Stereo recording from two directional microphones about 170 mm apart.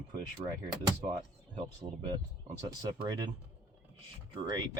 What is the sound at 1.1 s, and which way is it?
Speech, 25° right (ahead or behind).